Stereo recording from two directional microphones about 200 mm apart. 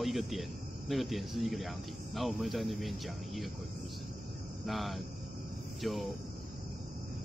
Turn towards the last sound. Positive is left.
turn(degrees=0)  # may be behind; listen again after turning